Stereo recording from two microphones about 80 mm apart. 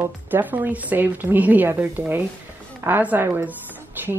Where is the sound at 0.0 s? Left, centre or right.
Right.